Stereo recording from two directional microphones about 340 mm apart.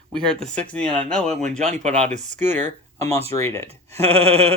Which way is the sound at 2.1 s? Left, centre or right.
Centre.